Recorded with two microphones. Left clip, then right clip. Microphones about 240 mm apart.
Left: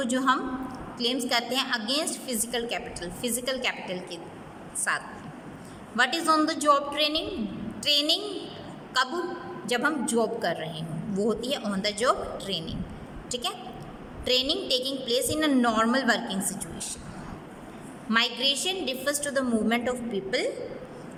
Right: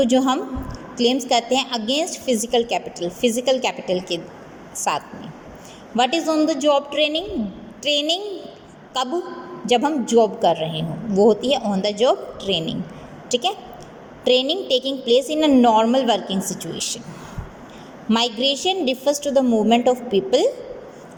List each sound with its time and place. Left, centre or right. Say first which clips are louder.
0.0 s a man's voice: right 7 dB; centre
18.1 s a man's voice: right 5 dB; centre